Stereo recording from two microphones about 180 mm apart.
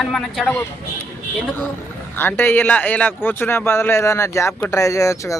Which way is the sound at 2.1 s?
10° left (ahead or behind).